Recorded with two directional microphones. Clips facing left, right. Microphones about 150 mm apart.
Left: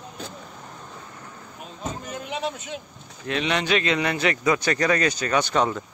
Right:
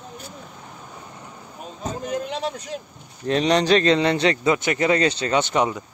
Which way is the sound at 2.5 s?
35° right (ahead or behind).